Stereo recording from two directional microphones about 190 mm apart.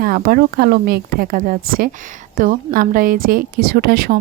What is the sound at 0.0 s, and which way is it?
A woman's voice, 50° right (ahead or behind).